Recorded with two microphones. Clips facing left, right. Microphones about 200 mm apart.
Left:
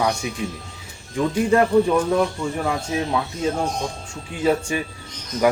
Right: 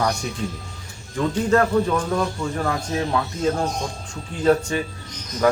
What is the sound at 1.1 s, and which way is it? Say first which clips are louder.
Speech: left 1 dB; 10° left (ahead or behind).